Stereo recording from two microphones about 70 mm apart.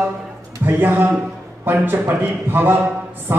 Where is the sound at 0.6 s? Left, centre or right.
Right.